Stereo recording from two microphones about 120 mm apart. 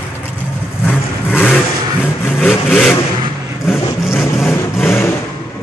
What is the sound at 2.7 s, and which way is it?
Vehicle, 15° left (ahead or behind).